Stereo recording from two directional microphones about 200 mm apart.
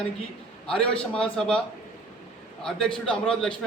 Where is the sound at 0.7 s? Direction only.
5° left (ahead or behind).